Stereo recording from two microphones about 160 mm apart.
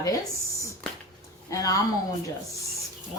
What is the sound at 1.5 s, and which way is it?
Speech, 20° left (ahead or behind).